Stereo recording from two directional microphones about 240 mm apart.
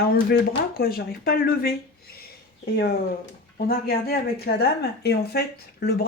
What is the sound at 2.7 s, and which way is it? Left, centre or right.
Speech, left.